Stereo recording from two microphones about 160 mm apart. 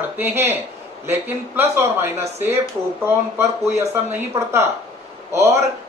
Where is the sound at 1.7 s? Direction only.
15° right (ahead or behind).